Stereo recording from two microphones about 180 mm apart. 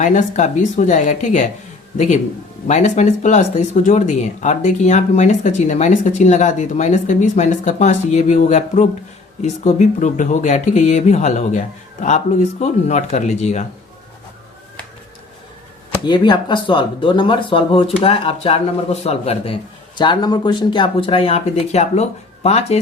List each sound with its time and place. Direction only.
0.0 s speech: 45° left (ahead or behind)
2.6 s speech: 40° left (ahead or behind)
16.0 s speech: 25° left (ahead or behind)